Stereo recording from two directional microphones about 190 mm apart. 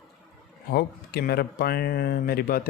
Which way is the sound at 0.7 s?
55° left (ahead or behind).